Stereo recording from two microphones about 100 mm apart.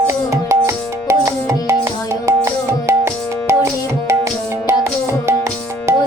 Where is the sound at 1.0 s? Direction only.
30° right (ahead or behind).